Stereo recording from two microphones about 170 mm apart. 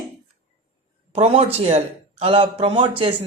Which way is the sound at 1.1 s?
35° right (ahead or behind).